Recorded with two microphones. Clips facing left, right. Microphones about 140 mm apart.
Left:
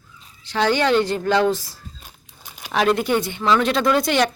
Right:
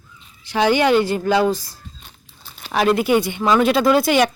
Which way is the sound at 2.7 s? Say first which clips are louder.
Right 2 dB; 5° right (ahead or behind).